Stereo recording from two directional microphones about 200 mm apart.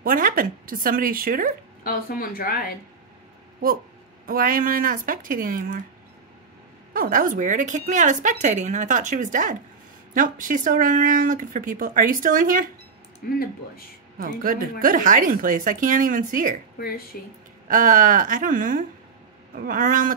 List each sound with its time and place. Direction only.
0.0 s speech: 45° right (ahead or behind)
1.8 s speech: 45° left (ahead or behind)
4.3 s speech: 45° right (ahead or behind)
6.9 s speech: 45° right (ahead or behind)
13.2 s speech: 50° left (ahead or behind)
14.1 s speech: 45° right (ahead or behind)
16.7 s speech: 50° left (ahead or behind)
17.6 s speech: 40° right (ahead or behind)